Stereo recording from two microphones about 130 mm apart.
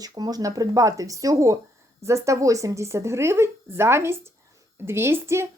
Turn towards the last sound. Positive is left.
turn(degrees=-20)  # may be behind; listen again after turning